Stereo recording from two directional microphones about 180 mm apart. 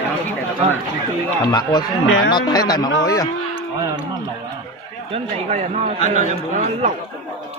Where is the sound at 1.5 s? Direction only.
25° left (ahead or behind).